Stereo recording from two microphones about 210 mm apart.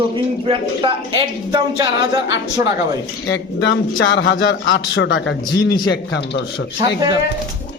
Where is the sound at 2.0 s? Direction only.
60° left (ahead or behind).